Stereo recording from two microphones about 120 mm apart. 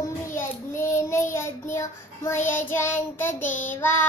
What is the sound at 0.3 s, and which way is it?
Child singing, 20° left (ahead or behind).